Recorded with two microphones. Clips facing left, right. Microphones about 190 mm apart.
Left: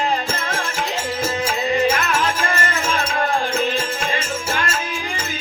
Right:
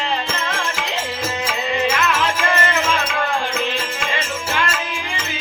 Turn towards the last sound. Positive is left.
turn(degrees=45)  # may be behind; listen again after turning